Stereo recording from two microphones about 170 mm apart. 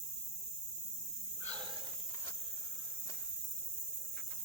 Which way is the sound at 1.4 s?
25° right (ahead or behind).